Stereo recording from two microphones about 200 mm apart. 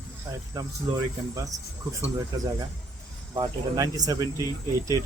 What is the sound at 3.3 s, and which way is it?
Speech, 20° right (ahead or behind).